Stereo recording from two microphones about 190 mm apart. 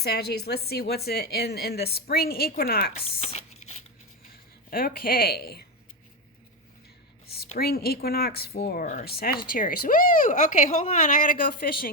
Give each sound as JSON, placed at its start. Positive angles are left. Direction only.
{"t": 0.0, "sound": "a woman's voice", "side_deg": 55}
{"t": 3.0, "sound": "a sound", "side_deg": 35}
{"t": 4.7, "sound": "speech", "side_deg": 50}
{"t": 7.6, "sound": "speech", "side_deg": 55}